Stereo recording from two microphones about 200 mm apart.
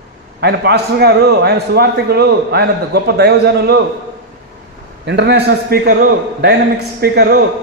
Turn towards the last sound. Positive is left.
turn(degrees=-50)  # may be behind; listen again after turning